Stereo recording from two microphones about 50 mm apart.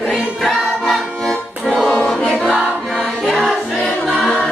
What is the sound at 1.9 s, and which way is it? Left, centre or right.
Music, left.